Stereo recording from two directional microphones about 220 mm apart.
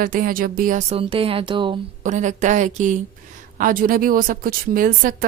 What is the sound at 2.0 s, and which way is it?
Speech, 35° right (ahead or behind).